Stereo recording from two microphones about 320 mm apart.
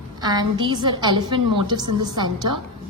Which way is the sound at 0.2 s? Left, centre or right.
Centre.